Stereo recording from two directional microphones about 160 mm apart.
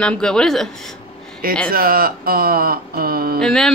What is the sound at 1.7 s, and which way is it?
Speech, 65° right (ahead or behind).